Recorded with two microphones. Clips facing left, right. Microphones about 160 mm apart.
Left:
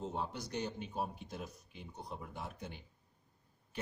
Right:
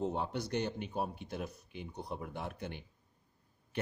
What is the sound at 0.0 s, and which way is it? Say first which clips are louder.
A man's voice: right 5 dB; 65° right (ahead or behind).